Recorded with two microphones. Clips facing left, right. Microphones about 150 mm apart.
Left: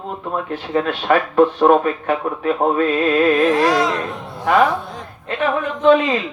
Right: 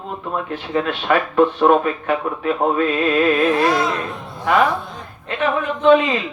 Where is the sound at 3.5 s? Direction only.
90° left.